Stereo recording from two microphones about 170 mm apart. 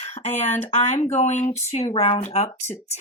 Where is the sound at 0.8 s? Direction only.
35° left (ahead or behind).